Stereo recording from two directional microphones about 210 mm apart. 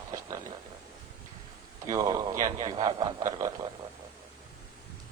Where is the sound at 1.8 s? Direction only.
15° right (ahead or behind).